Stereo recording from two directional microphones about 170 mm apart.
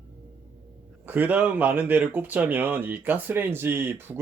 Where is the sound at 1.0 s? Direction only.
10° right (ahead or behind).